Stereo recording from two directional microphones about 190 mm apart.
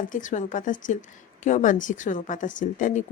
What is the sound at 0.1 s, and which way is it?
A woman's voice, 40° left (ahead or behind).